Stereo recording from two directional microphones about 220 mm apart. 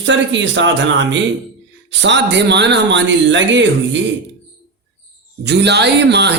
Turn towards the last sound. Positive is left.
turn(degrees=-50)  # may be behind; listen again after turning